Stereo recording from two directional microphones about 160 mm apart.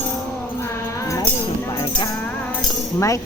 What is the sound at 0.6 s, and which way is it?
Music, 20° left (ahead or behind).